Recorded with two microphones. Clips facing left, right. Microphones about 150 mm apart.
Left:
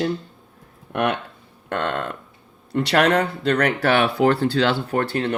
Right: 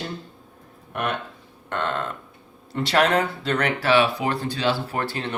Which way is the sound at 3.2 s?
40° left (ahead or behind).